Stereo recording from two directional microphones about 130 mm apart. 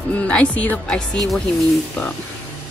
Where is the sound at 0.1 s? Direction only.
10° left (ahead or behind).